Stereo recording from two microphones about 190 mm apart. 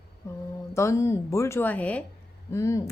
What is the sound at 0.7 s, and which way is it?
A woman's voice, 15° left (ahead or behind).